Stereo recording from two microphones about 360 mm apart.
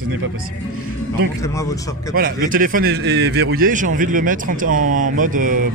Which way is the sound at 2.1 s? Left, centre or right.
Right.